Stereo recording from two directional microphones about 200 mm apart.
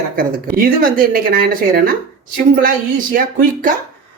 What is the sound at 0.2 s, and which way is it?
Speech, 45° right (ahead or behind).